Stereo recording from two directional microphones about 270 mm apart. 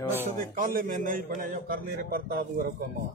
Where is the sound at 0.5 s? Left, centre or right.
Right.